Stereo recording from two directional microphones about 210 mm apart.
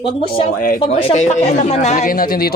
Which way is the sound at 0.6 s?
40° left (ahead or behind).